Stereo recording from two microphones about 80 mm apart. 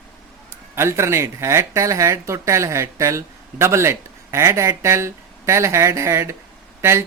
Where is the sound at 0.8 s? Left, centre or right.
Right.